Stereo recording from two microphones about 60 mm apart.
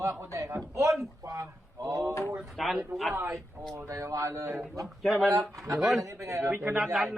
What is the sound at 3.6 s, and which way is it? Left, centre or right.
Speech, right.